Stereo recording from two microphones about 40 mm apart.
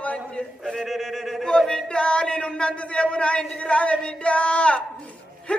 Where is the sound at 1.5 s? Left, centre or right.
Centre.